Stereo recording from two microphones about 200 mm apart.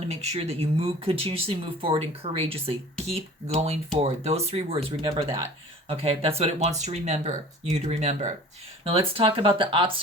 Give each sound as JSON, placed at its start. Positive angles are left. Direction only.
{"t": 0.1, "sound": "speech", "side_deg": -30}